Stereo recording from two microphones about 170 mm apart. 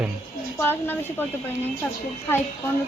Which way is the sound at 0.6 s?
10° left (ahead or behind).